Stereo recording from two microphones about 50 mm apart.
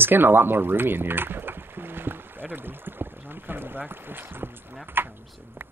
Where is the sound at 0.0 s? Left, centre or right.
Right.